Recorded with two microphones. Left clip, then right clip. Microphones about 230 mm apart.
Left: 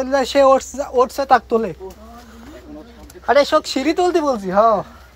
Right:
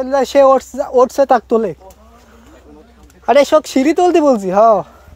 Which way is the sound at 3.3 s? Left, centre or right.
Right.